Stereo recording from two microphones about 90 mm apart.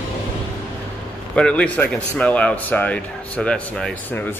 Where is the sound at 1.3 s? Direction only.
10° left (ahead or behind).